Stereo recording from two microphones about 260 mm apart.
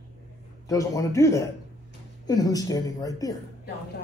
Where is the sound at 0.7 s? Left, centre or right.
Centre.